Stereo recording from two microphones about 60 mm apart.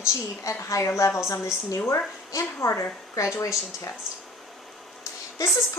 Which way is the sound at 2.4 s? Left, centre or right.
Left.